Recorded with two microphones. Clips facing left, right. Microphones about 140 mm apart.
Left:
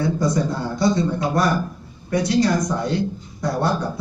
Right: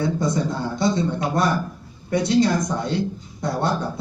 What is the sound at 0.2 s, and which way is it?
Speech, 25° right (ahead or behind).